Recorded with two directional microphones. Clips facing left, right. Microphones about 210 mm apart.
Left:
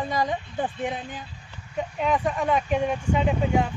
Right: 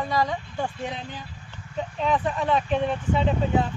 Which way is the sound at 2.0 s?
15° left (ahead or behind).